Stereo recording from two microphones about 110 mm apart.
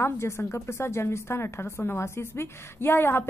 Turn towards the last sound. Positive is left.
turn(degrees=20)  # may be behind; listen again after turning